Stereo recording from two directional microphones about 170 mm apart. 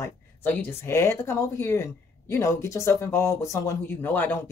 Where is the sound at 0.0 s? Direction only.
10° left (ahead or behind).